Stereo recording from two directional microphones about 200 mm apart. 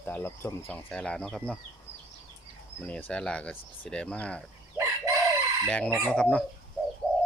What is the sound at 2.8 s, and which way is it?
Speech, 5° left (ahead or behind).